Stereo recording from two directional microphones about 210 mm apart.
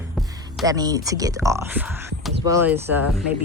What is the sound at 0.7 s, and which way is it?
Speech, 15° right (ahead or behind).